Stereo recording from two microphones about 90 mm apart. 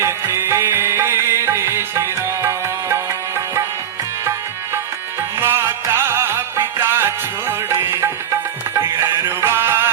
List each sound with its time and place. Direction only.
0.0 s music: 30° right (ahead or behind)
5.4 s music: 25° right (ahead or behind)